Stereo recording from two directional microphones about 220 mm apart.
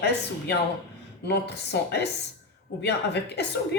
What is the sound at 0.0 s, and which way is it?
A woman's voice, 50° left (ahead or behind).